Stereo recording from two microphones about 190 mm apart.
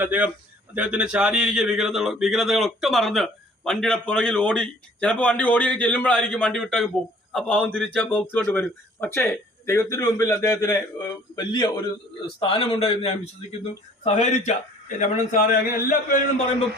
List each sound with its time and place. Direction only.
0.0 s a man's voice: 10° right (ahead or behind); by 16.1 s 50° left (ahead or behind)